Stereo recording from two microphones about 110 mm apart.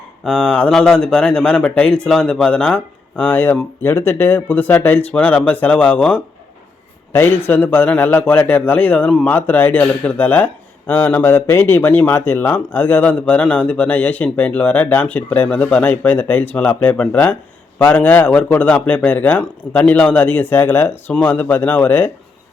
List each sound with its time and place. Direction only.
0.3 s a man's voice: 5° left (ahead or behind)